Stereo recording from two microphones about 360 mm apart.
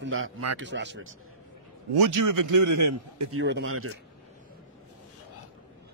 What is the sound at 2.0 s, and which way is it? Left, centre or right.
A man's voice, right.